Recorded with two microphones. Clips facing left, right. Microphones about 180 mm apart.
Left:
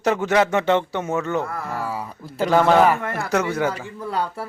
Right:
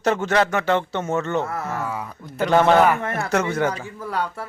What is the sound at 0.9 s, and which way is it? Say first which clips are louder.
Speech: even; 10° left (ahead or behind).